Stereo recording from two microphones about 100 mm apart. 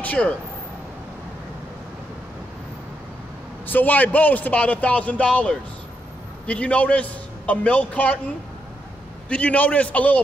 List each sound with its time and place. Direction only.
0.0 s speech: 15° left (ahead or behind)
3.6 s a man's voice: 20° left (ahead or behind)
9.3 s a man's voice: 15° left (ahead or behind)